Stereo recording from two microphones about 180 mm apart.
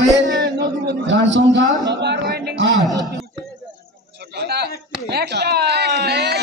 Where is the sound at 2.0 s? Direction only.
65° right (ahead or behind); by 2.8 s 85° right.